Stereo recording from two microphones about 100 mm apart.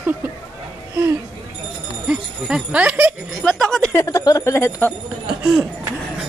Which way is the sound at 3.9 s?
35° left (ahead or behind).